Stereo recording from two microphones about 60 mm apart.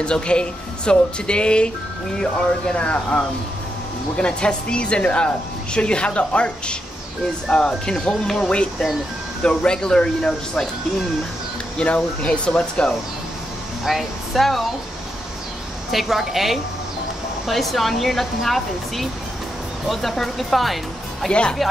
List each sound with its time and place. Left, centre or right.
0.0 s speech: centre
8.5 s speech: centre
11.8 s speech: left
13.8 s speech: centre
15.9 s speech: centre
21.3 s speech: centre